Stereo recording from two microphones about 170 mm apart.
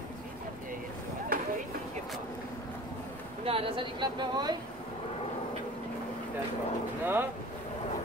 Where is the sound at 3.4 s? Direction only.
30° right (ahead or behind).